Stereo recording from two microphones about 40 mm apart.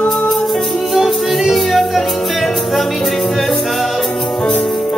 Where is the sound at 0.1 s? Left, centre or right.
Centre.